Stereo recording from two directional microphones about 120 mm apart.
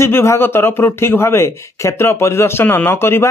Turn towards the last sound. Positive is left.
turn(degrees=20)  # may be behind; listen again after turning